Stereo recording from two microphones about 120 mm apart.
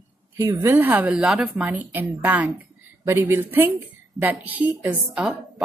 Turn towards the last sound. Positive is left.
turn(degrees=-10)  # may be behind; listen again after turning